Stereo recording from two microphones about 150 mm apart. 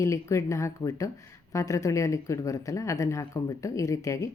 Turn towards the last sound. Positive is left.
turn(degrees=20)  # may be behind; listen again after turning